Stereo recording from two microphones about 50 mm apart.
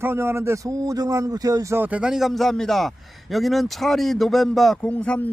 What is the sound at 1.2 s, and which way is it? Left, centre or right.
Speech, right.